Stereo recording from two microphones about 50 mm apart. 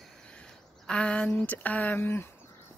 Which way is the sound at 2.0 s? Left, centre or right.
Left.